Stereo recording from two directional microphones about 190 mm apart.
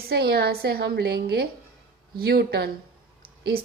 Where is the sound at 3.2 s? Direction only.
50° right (ahead or behind).